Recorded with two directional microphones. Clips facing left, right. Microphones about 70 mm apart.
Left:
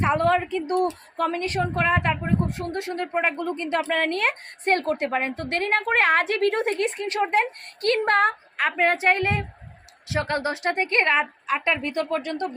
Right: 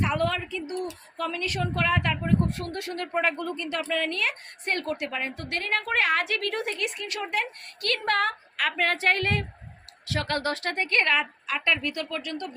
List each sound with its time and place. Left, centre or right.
0.0 s a woman's voice: left
3.8 s a woman's voice: left